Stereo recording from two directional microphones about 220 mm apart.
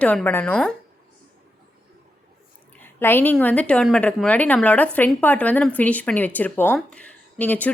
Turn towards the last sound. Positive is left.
turn(degrees=5)  # may be behind; listen again after turning